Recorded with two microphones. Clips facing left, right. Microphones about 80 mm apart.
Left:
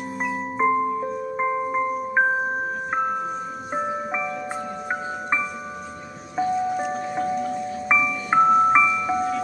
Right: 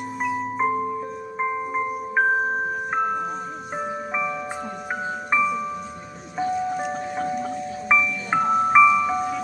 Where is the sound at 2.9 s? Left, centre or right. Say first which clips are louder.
Even; centre.